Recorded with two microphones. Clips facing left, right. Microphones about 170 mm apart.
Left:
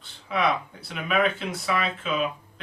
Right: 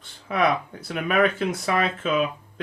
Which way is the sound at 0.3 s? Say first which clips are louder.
Right 3 dB; 50° right (ahead or behind).